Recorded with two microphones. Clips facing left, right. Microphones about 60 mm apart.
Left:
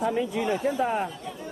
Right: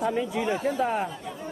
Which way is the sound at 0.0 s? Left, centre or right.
Centre.